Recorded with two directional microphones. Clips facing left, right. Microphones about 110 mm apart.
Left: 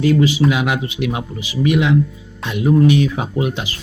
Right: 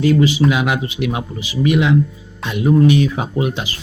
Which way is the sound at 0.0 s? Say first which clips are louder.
Even; 35° right (ahead or behind).